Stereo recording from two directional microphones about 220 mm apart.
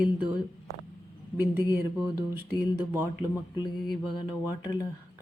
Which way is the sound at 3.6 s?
20° left (ahead or behind).